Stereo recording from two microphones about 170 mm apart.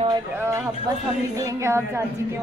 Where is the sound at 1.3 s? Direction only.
15° right (ahead or behind).